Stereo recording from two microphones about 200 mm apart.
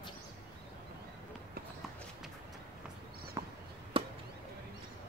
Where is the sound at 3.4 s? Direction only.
15° right (ahead or behind).